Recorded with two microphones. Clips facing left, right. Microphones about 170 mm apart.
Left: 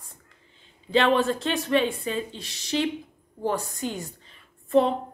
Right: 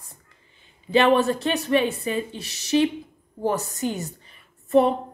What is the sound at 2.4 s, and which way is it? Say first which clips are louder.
Speech: right 3 dB; 75° right (ahead or behind).